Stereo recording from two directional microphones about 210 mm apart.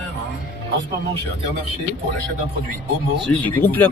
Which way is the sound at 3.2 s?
10° left (ahead or behind).